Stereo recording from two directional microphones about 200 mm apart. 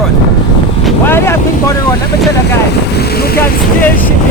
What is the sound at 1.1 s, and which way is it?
Speech, 15° left (ahead or behind).